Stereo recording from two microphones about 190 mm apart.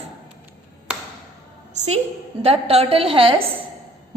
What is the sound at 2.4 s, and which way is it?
Speech, 30° right (ahead or behind).